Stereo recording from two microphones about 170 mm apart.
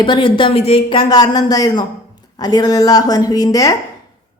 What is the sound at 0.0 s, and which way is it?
A woman's voice, 30° left (ahead or behind).